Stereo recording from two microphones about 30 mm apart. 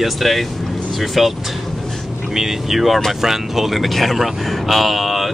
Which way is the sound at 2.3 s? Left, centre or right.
Centre.